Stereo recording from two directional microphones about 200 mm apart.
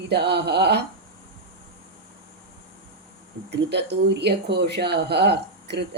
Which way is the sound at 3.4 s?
55° right (ahead or behind).